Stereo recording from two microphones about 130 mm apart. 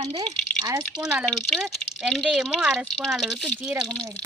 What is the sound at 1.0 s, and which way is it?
Speech, 5° right (ahead or behind).